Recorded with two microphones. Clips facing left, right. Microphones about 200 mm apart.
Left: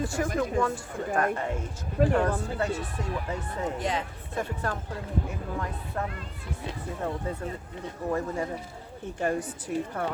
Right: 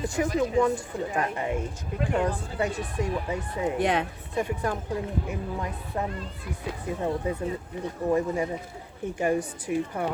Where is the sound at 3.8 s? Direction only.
65° right (ahead or behind).